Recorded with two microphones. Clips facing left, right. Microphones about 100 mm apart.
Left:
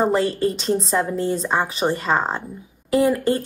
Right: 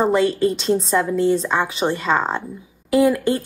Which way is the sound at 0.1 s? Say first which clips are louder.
Right 2 dB; 40° left (ahead or behind).